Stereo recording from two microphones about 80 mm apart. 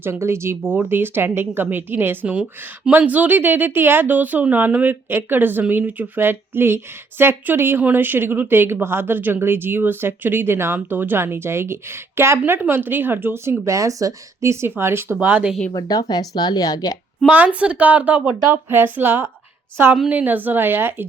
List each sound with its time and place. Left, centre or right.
0.0 s a woman's voice: right
2.2 s a woman's voice: centre
15.7 s speech: left
17.2 s a woman's voice: centre